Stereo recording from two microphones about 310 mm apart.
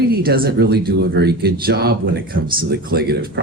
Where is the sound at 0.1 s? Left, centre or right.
Right.